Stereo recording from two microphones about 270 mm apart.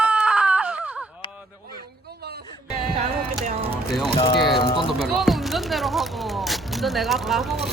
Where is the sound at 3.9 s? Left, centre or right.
Centre.